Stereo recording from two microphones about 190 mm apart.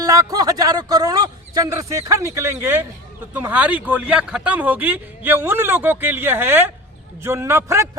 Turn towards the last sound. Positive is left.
turn(degrees=-15)  # may be behind; listen again after turning